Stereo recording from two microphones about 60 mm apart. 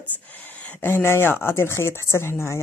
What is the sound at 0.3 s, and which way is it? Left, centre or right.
Speech, left.